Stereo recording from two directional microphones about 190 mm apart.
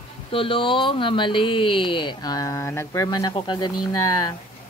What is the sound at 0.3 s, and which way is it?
Speech, 30° left (ahead or behind).